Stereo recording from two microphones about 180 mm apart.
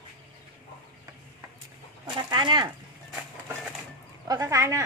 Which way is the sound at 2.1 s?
25° right (ahead or behind).